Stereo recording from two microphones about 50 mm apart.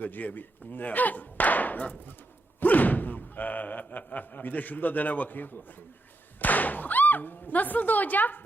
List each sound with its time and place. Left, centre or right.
0.0 s speech: left